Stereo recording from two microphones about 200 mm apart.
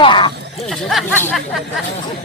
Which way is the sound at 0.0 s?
25° left (ahead or behind).